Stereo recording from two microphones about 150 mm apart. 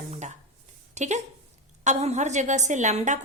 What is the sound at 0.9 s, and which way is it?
A woman's voice, 50° right (ahead or behind).